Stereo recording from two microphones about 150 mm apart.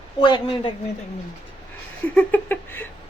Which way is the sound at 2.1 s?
10° left (ahead or behind).